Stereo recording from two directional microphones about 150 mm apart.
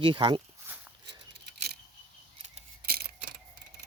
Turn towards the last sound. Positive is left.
turn(degrees=-90)